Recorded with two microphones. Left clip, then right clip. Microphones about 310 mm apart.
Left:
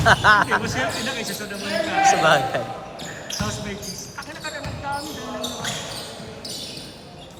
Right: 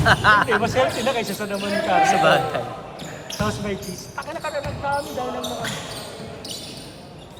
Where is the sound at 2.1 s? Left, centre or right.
Left.